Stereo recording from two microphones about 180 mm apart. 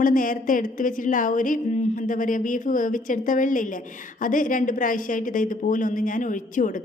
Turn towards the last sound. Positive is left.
turn(degrees=45)  # may be behind; listen again after turning